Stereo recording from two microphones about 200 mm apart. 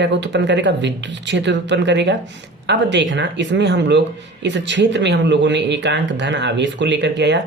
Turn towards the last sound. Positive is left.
turn(degrees=-60)  # may be behind; listen again after turning